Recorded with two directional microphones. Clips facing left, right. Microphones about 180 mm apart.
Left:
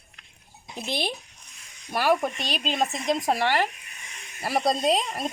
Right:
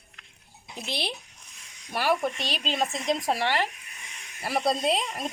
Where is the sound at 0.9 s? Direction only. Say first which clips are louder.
Left 4 dB; 50° left (ahead or behind).